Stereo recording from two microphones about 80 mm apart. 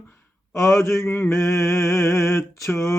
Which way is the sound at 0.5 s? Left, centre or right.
Left.